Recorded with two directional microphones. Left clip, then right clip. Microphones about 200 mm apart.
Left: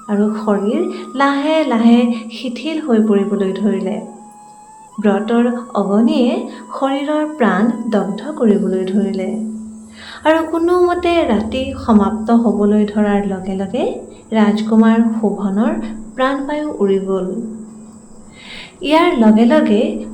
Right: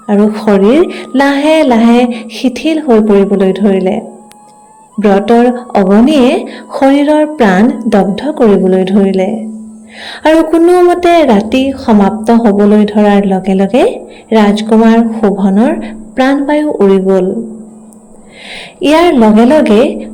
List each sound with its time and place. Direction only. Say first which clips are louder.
0.1 s a woman's voice: right 8 dB; 40° right (ahead or behind)
18.5 s a sound: right 6 dB; 35° right (ahead or behind)
19.6 s a woman's voice: right 8 dB; 35° right (ahead or behind)